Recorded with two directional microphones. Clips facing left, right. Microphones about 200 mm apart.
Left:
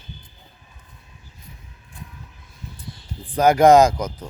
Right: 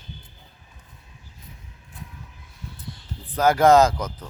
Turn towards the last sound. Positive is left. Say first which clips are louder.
# left 3 dB
turn(degrees=10)  # may be behind; listen again after turning